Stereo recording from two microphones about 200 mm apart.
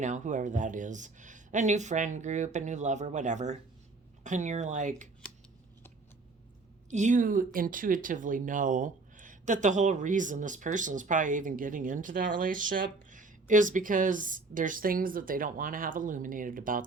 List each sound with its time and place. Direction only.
0.0 s speech: 35° right (ahead or behind)
6.9 s speech: 35° right (ahead or behind)